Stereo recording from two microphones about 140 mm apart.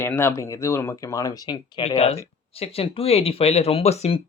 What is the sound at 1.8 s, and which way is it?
Speech, 50° left (ahead or behind).